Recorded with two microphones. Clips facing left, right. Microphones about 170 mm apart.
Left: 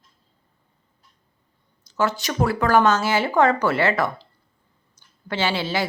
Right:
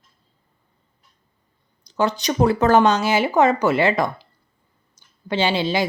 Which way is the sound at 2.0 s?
20° right (ahead or behind).